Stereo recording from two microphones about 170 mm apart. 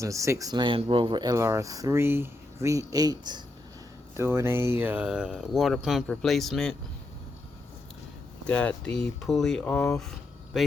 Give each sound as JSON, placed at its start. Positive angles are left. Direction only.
{"t": 0.0, "sound": "speech", "side_deg": -20}
{"t": 8.4, "sound": "speech", "side_deg": 5}